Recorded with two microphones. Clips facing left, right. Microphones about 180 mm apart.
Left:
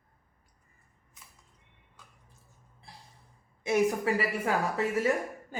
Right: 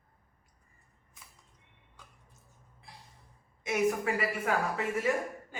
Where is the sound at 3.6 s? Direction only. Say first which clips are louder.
Left 3 dB; 30° left (ahead or behind).